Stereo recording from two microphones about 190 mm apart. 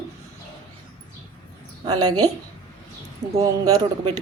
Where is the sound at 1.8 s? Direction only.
20° right (ahead or behind).